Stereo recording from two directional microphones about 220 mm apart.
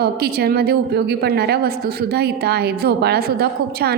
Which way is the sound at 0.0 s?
45° right (ahead or behind).